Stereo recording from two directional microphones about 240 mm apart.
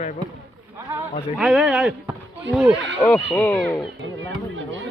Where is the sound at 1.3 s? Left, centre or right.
Centre.